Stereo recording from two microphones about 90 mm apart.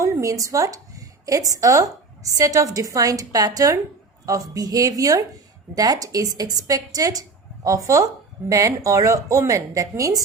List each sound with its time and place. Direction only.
0.0 s a woman's voice: 35° right (ahead or behind)